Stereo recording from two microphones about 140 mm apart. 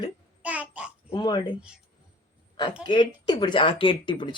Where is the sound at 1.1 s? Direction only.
30° left (ahead or behind).